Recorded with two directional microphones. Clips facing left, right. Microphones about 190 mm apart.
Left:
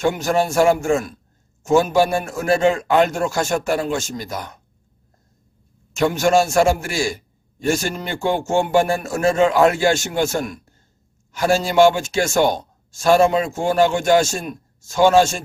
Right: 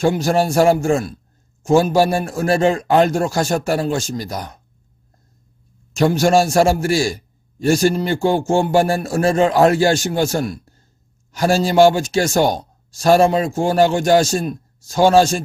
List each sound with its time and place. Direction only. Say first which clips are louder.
0.0 s a man's voice: right 2 dB; 35° right (ahead or behind)
5.9 s a man's voice: right 2 dB; 35° right (ahead or behind)